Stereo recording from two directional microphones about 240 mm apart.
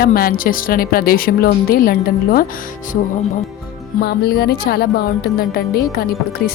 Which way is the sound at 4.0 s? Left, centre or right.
Left.